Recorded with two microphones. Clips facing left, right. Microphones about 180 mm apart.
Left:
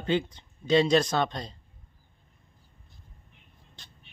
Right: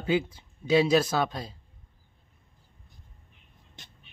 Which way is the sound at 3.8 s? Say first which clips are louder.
Right 3 dB; 20° right (ahead or behind).